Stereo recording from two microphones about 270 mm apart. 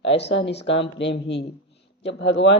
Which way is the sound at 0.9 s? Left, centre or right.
Left.